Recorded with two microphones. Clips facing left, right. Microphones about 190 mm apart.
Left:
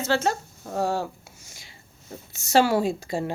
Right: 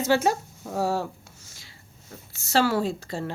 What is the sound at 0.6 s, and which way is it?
Speech, centre (ahead or behind).